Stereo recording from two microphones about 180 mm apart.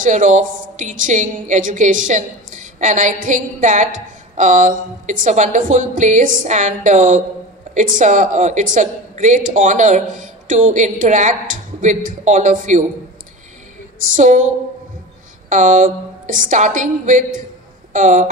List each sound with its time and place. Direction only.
0.0 s a woman's voice: 45° right (ahead or behind)
13.9 s a woman's voice: 45° right (ahead or behind)
15.5 s a woman's voice: 45° right (ahead or behind)